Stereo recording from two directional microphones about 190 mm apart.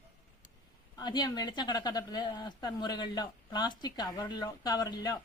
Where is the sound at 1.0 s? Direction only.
20° left (ahead or behind).